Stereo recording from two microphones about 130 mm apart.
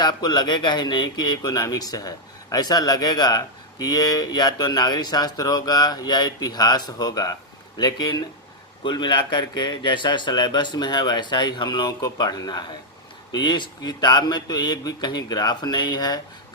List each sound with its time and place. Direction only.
0.0 s speech: 30° left (ahead or behind)